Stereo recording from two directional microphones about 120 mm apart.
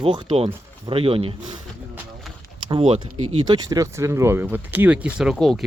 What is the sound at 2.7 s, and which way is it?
Speech, 50° right (ahead or behind).